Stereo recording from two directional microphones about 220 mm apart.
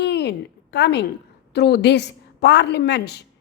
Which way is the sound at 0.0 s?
50° left (ahead or behind).